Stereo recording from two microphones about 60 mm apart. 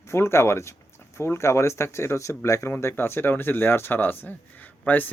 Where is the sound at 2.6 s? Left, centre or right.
Left.